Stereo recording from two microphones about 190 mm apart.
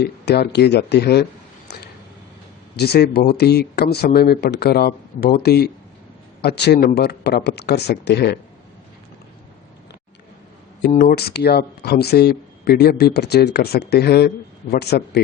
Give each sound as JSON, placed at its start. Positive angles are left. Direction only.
{"t": 0.0, "sound": "speech", "side_deg": 60}
{"t": 1.7, "sound": "a sound", "side_deg": 60}
{"t": 2.7, "sound": "speech", "side_deg": 55}
{"t": 10.8, "sound": "speech", "side_deg": 55}